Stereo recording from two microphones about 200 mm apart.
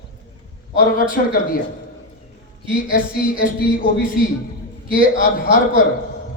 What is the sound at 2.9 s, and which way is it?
Speech, 45° left (ahead or behind).